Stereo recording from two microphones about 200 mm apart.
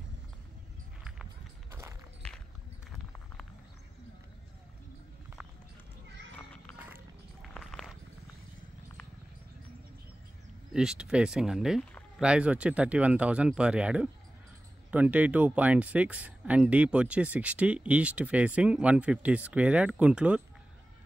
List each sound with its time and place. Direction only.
1.7 s walk: 15° right (ahead or behind)
6.3 s a sound: 5° left (ahead or behind)
10.7 s speech: 5° right (ahead or behind)